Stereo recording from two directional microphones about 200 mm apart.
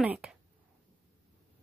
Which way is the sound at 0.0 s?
5° right (ahead or behind).